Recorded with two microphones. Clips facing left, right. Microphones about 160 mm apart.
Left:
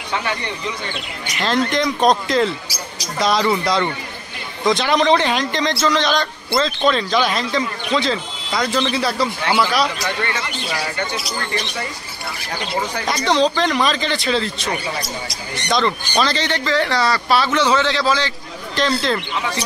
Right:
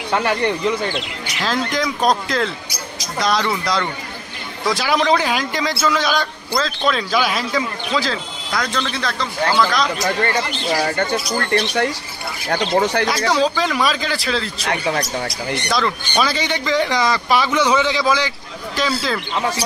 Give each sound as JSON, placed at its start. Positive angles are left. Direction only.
{"t": 0.1, "sound": "speech", "side_deg": -55}
{"t": 1.4, "sound": "a man's voice", "side_deg": 0}
{"t": 10.2, "sound": "speech", "side_deg": -35}
{"t": 11.3, "sound": "speech", "side_deg": -65}
{"t": 13.0, "sound": "a man's voice", "side_deg": -5}
{"t": 15.7, "sound": "a man's voice", "side_deg": -5}